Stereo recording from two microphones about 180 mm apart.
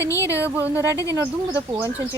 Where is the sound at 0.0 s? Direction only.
15° left (ahead or behind).